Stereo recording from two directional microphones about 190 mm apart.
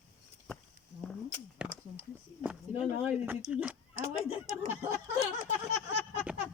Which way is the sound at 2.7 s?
10° right (ahead or behind).